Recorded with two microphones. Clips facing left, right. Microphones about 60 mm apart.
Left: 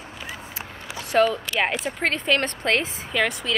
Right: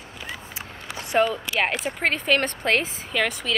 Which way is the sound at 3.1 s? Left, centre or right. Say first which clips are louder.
Left 1 dB; centre.